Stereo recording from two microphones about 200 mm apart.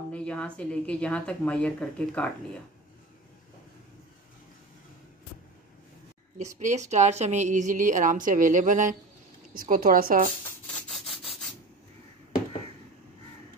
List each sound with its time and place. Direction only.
0.1 s speech: 5° left (ahead or behind)
6.6 s a woman's voice: 35° right (ahead or behind)